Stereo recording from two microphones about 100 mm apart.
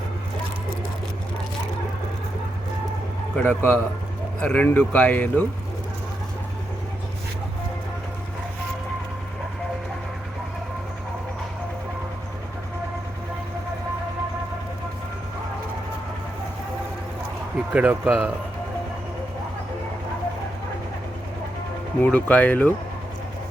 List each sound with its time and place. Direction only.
3.3 s a man's voice: 20° left (ahead or behind)
17.7 s speech: 10° right (ahead or behind)
22.0 s speech: 15° left (ahead or behind)